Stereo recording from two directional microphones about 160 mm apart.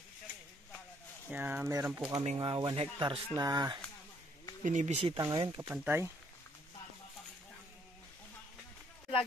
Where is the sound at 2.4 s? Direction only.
25° right (ahead or behind).